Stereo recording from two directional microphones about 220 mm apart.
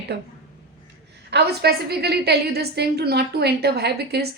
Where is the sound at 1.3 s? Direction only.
50° right (ahead or behind).